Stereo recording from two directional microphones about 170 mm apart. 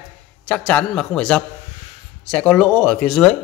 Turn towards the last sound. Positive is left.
turn(degrees=0)  # may be behind; listen again after turning